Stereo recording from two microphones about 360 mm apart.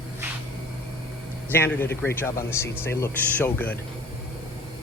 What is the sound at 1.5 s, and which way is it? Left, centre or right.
Speech, centre.